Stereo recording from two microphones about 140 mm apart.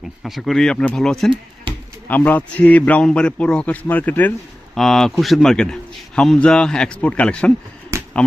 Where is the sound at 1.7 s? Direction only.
40° right (ahead or behind).